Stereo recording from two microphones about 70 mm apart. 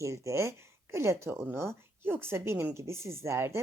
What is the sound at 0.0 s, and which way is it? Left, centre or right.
A woman's voice, right.